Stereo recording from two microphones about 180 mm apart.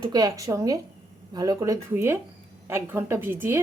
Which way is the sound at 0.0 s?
20° right (ahead or behind).